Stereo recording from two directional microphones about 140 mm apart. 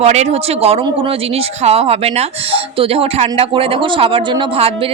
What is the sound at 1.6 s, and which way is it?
Speech, 45° right (ahead or behind).